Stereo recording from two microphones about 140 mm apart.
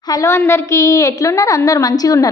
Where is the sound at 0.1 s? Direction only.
20° left (ahead or behind).